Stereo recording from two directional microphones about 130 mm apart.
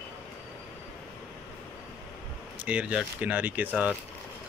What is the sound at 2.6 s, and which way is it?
Speech, 10° right (ahead or behind).